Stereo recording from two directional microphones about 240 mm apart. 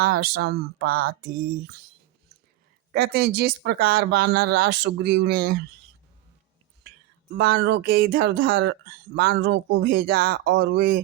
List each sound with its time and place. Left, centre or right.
0.0 s speech: right
2.9 s speech: right
7.3 s speech: right